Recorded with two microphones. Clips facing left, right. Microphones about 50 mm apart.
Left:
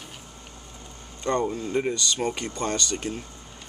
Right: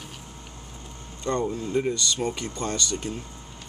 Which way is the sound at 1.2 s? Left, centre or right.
Left.